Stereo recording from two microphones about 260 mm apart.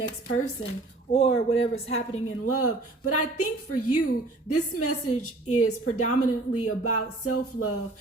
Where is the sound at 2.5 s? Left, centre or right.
Left.